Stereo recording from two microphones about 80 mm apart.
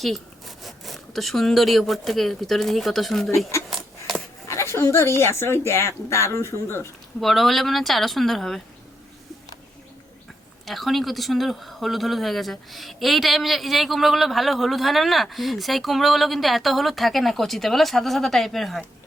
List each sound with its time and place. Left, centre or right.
0.0 s speech: centre
3.7 s a sound: centre
4.4 s speech: left
7.2 s speech: centre
10.7 s speech: centre